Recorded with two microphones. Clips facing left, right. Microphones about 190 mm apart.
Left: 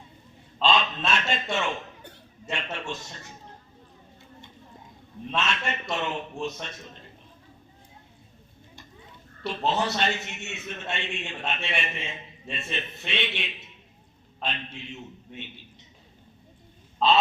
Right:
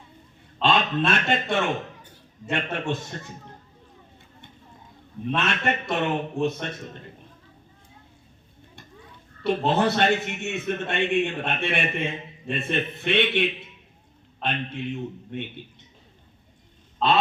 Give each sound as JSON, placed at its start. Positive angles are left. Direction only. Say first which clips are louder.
{"t": 0.6, "sound": "a man's voice", "louder": "right 3 dB", "side_deg": -55}
{"t": 5.3, "sound": "a man's voice", "louder": "right 4 dB", "side_deg": -55}
{"t": 9.5, "sound": "a man's voice", "louder": "right 5 dB", "side_deg": -55}
{"t": 17.0, "sound": "grunt", "louder": "even", "side_deg": 0}